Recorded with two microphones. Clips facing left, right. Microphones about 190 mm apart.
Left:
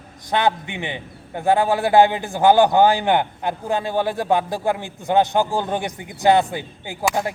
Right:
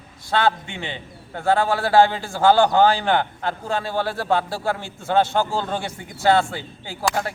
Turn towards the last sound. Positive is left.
turn(degrees=15)  # may be behind; listen again after turning